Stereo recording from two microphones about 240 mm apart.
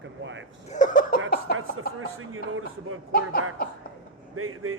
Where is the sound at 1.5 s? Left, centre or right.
Right.